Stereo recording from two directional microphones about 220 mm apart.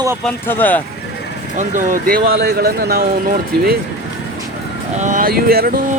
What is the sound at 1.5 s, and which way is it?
Speech, 35° right (ahead or behind).